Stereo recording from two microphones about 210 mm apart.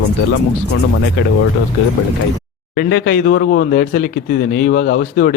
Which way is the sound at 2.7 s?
55° left (ahead or behind).